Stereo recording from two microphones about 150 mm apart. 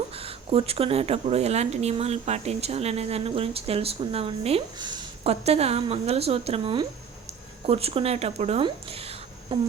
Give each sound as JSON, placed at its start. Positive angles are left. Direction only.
{"t": 0.1, "sound": "speech", "side_deg": -40}
{"t": 5.3, "sound": "a woman's voice", "side_deg": -45}
{"t": 8.6, "sound": "a sound", "side_deg": -40}